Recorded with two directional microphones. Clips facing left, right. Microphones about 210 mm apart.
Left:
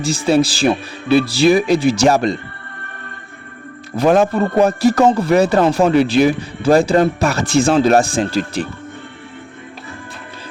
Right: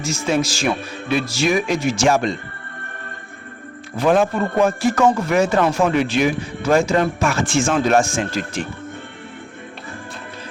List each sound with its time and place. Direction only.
0.0 s speech: 35° left (ahead or behind)
3.9 s speech: 40° left (ahead or behind)